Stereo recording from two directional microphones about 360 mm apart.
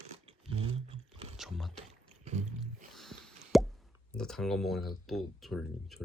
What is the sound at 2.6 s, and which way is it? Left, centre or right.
Plop, centre.